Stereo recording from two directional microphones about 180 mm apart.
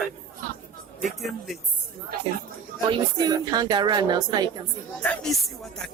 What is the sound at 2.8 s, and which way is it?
Speech, 25° right (ahead or behind).